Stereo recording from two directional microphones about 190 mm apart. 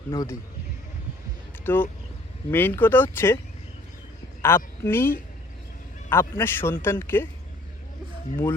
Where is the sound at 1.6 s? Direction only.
10° left (ahead or behind).